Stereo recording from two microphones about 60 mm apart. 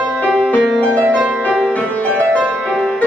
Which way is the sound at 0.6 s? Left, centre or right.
Centre.